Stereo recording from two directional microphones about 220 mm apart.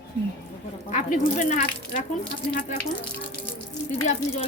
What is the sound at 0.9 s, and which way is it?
Speech, 35° left (ahead or behind).